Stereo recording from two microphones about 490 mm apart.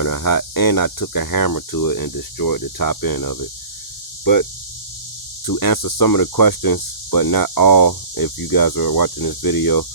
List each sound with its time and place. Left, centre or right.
0.0 s speech: left
5.5 s speech: left